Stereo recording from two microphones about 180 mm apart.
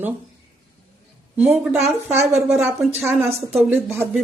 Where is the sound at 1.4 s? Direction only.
10° right (ahead or behind).